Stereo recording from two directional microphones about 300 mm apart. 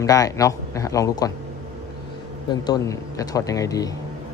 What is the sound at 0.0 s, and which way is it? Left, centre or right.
A man's voice, centre.